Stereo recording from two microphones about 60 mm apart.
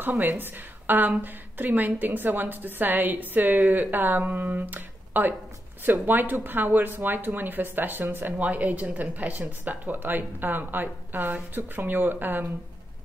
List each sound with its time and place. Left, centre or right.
0.0 s speech: right